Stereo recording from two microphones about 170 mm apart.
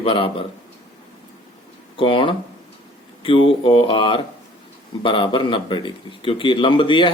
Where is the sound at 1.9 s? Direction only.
30° left (ahead or behind).